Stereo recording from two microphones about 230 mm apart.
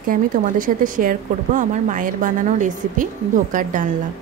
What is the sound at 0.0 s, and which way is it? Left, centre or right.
Speech, right.